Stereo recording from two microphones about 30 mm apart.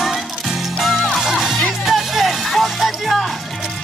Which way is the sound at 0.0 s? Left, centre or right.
Centre.